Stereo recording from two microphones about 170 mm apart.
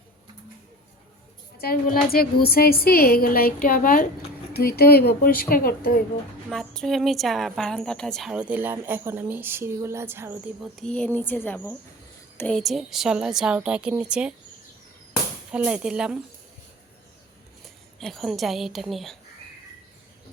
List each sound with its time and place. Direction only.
1.5 s a woman's voice: 65° left (ahead or behind)
4.5 s speech: 65° left (ahead or behind)
6.5 s a woman's voice: centre (ahead or behind); by 10.3 s 15° right (ahead or behind)
10.6 s speech: centre (ahead or behind)
12.5 s a woman's voice: centre (ahead or behind)
15.5 s a woman's voice: 5° right (ahead or behind)
18.0 s a woman's voice: centre (ahead or behind)